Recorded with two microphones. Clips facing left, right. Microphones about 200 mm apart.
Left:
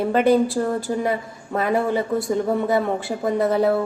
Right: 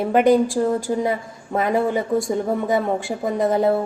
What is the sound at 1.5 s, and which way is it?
Speech, 15° right (ahead or behind).